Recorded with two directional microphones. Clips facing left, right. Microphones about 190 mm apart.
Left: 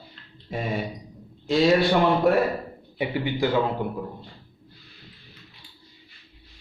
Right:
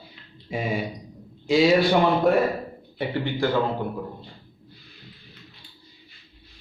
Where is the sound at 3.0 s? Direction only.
15° left (ahead or behind).